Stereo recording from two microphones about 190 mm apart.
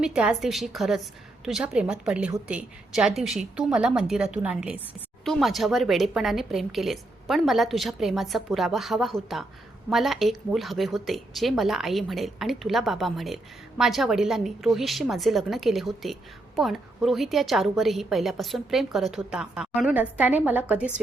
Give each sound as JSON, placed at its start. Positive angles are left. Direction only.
{"t": 0.0, "sound": "a woman's voice", "side_deg": -5}